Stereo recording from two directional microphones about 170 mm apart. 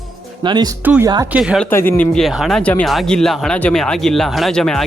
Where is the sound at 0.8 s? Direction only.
10° right (ahead or behind).